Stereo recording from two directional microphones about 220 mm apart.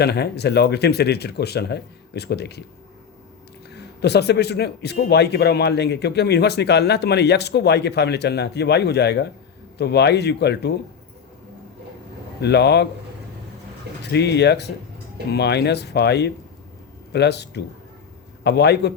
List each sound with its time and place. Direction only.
0.0 s a man's voice: 50° left (ahead or behind)
3.8 s a man's voice: 50° left (ahead or behind)
12.4 s a man's voice: 50° left (ahead or behind)
14.0 s a man's voice: 50° left (ahead or behind)